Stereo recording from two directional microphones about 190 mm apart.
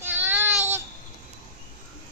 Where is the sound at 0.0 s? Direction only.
10° right (ahead or behind).